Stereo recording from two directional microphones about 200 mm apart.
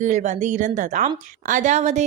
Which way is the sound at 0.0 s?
35° right (ahead or behind).